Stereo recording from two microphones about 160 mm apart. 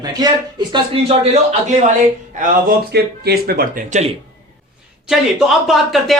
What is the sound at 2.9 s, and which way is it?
Speech, 85° right.